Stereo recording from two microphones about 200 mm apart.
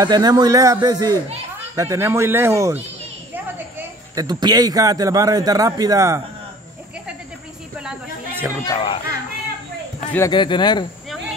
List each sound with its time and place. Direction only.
0.0 s a man's voice: 20° right (ahead or behind)
8.6 s speech: 25° left (ahead or behind)
9.9 s speech: 10° left (ahead or behind)
10.3 s speech: 25° left (ahead or behind)